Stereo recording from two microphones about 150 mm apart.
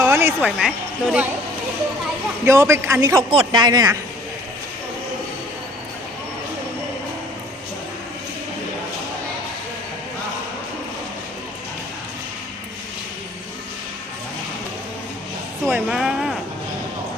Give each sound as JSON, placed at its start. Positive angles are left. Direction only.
{"t": 0.0, "sound": "music", "side_deg": -15}
{"t": 0.6, "sound": "speech", "side_deg": -10}
{"t": 2.4, "sound": "a man's voice", "side_deg": -20}
{"t": 3.2, "sound": "a man's voice", "side_deg": -30}
{"t": 15.9, "sound": "a sound", "side_deg": -5}